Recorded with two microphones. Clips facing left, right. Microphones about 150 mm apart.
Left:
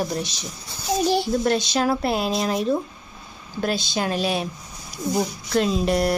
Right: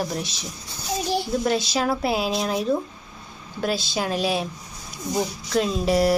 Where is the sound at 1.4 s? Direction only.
5° right (ahead or behind).